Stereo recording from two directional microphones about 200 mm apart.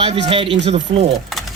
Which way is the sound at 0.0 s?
30° right (ahead or behind).